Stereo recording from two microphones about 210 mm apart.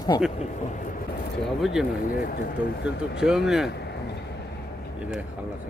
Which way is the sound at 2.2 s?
45° left (ahead or behind).